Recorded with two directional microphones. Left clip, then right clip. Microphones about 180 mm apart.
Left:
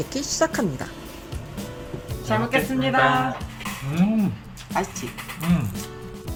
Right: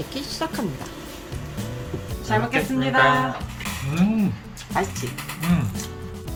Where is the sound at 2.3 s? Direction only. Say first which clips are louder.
Right 1 dB; 60° left (ahead or behind).